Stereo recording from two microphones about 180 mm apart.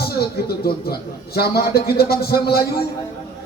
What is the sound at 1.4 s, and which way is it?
Speech, 60° left (ahead or behind).